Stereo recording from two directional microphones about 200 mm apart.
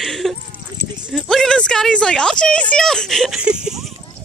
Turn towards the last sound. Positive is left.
turn(degrees=-5)  # may be behind; listen again after turning